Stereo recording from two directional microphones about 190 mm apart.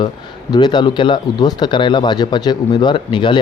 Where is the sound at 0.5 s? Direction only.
20° left (ahead or behind).